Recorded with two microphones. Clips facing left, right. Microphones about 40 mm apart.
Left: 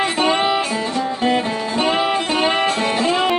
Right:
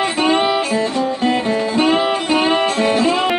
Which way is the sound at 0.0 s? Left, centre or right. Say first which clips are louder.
Right 2 dB; centre.